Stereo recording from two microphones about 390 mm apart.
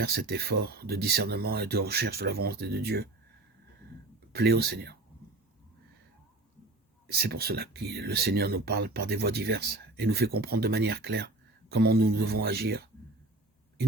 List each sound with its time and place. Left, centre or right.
0.2 s speech: right
4.3 s speech: right
7.1 s speech: right